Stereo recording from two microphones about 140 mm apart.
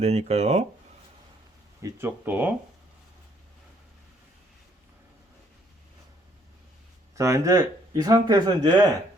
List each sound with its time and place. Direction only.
0.0 s speech: 50° right (ahead or behind)
1.8 s speech: 15° right (ahead or behind)
7.2 s speech: 25° right (ahead or behind)